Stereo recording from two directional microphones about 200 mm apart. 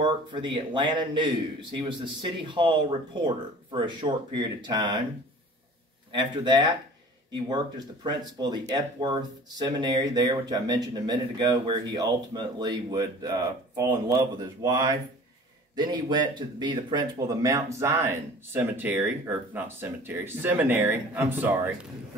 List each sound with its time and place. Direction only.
0.0 s speech: 25° right (ahead or behind)
6.1 s speech: 25° right (ahead or behind)